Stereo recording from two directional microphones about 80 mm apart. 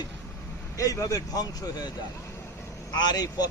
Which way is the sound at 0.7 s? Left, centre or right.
Left.